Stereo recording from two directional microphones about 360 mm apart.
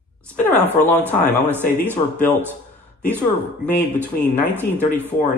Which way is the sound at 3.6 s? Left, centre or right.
Centre.